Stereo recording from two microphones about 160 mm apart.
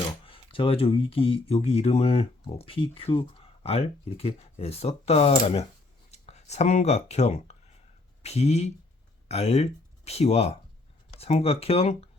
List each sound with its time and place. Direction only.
0.3 s speech: 35° left (ahead or behind)